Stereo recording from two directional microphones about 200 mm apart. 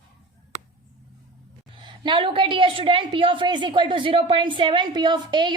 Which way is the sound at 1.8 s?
25° right (ahead or behind).